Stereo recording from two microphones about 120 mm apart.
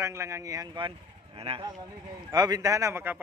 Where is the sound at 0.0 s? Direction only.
25° right (ahead or behind).